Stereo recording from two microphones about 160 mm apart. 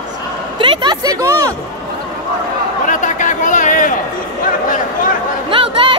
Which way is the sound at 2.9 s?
50° left (ahead or behind).